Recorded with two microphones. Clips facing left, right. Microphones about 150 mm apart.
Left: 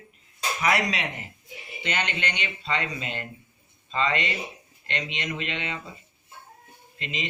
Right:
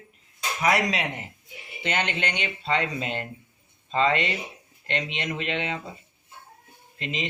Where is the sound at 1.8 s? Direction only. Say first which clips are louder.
Right 2 dB; 50° right (ahead or behind).